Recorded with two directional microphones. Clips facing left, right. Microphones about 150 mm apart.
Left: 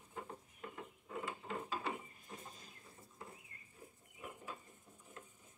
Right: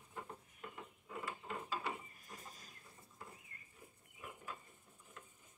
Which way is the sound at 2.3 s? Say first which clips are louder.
Left 2 dB; 25° left (ahead or behind).